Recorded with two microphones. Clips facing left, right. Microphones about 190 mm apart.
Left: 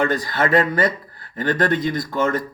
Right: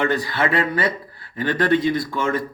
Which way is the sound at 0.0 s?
40° left (ahead or behind).